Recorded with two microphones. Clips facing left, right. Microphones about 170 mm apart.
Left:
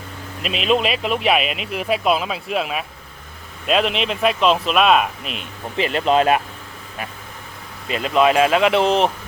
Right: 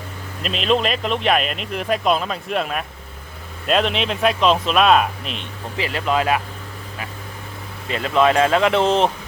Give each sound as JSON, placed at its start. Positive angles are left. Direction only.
{"t": 0.4, "sound": "speech", "side_deg": 5}
{"t": 5.8, "sound": "speech", "side_deg": 25}
{"t": 7.9, "sound": "speech", "side_deg": 20}